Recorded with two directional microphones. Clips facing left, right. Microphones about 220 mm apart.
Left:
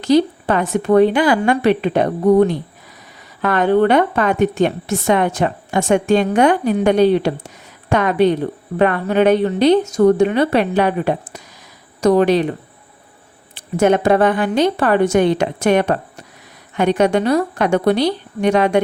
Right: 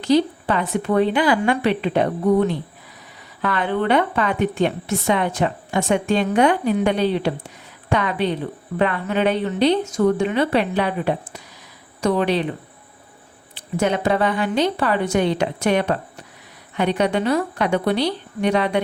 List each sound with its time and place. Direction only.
0.0 s a woman's voice: 45° left (ahead or behind)
13.5 s a woman's voice: 50° left (ahead or behind)